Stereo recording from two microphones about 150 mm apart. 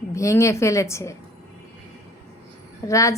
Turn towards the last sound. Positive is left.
turn(degrees=20)  # may be behind; listen again after turning